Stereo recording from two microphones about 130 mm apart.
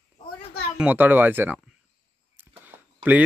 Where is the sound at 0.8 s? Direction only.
15° right (ahead or behind).